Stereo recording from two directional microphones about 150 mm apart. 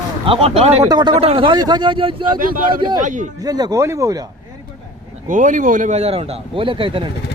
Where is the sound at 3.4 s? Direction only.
25° right (ahead or behind).